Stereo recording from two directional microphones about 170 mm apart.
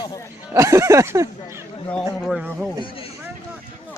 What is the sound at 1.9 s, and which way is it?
Speech, 5° left (ahead or behind).